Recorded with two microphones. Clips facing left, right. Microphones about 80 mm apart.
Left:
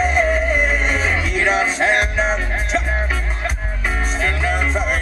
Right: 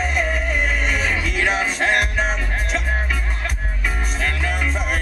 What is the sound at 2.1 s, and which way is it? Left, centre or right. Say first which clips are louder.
Music: left 3 dB; left.